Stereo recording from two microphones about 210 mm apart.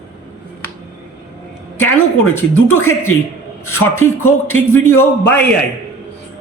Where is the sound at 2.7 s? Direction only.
10° left (ahead or behind).